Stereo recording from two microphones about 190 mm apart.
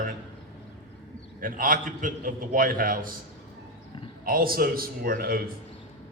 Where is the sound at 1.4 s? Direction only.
45° right (ahead or behind).